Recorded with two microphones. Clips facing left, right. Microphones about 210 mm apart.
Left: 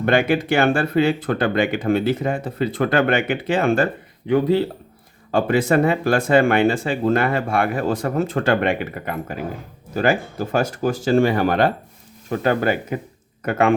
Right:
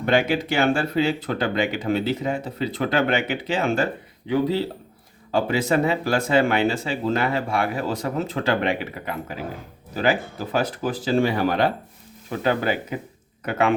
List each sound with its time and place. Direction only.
0.0 s speech: 55° left (ahead or behind)